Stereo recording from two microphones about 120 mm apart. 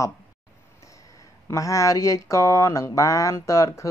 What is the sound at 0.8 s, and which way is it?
Speech, 25° left (ahead or behind).